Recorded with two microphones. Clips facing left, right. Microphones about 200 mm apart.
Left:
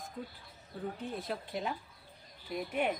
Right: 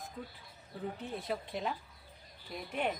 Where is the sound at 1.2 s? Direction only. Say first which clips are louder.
Right 3 dB; centre (ahead or behind).